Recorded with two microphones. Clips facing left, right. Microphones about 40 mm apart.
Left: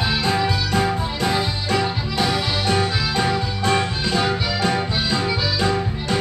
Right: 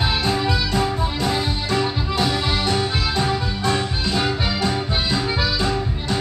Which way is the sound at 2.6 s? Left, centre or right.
Left.